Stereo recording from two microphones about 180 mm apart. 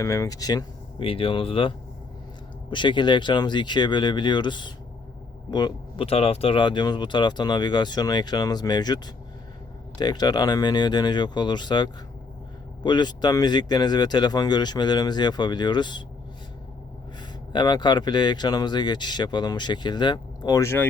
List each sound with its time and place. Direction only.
0.0 s speech: 20° left (ahead or behind)
10.0 s speech: 20° left (ahead or behind)
17.5 s speech: 25° left (ahead or behind)